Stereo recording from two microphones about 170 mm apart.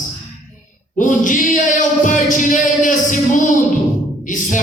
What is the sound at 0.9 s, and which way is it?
Singing, 50° left (ahead or behind).